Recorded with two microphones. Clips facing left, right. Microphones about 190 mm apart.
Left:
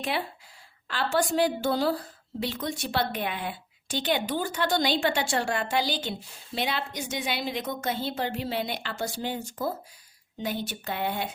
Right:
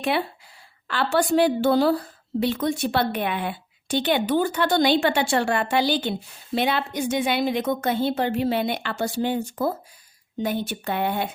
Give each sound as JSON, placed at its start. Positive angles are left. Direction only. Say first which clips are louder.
{"t": 0.9, "sound": "a woman's voice", "louder": "right 5 dB", "side_deg": -65}